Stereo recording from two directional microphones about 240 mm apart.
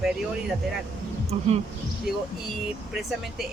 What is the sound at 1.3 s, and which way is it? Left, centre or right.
Speech, right.